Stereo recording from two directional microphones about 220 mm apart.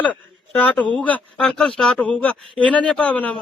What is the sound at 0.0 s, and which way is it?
A man's voice, 5° left (ahead or behind).